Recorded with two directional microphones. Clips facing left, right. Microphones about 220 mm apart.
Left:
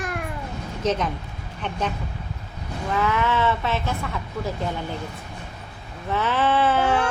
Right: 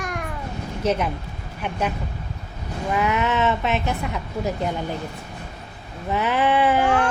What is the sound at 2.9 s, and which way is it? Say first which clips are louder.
Speech: right 1 dB; 15° right (ahead or behind).